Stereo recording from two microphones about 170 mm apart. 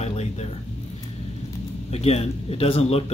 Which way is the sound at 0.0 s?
40° left (ahead or behind).